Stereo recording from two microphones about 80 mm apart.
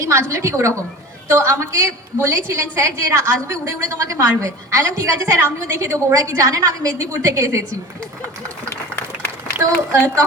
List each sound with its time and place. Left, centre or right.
0.0 s a woman's voice: right
9.6 s a woman's voice: right